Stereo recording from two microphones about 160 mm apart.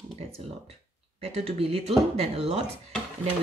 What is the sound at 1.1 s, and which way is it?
Speech, 40° right (ahead or behind).